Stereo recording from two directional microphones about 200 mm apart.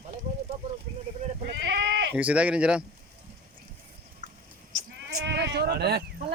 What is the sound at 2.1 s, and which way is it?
Speech, 5° right (ahead or behind).